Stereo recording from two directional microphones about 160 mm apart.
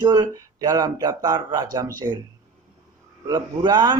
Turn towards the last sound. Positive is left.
turn(degrees=-25)  # may be behind; listen again after turning